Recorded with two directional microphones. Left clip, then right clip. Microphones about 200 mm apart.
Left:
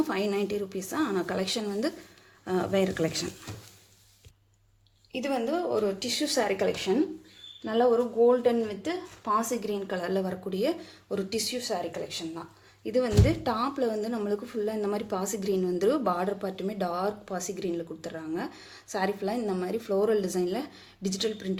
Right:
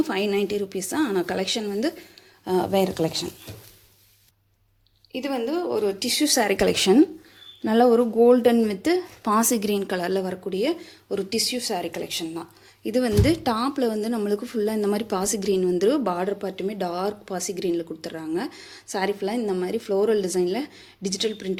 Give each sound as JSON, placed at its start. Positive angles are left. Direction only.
{"t": 0.0, "sound": "a woman's voice", "side_deg": -20}
{"t": 5.2, "sound": "a woman's voice", "side_deg": -10}